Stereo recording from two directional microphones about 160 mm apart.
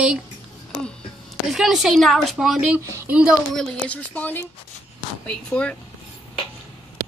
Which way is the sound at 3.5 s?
10° left (ahead or behind).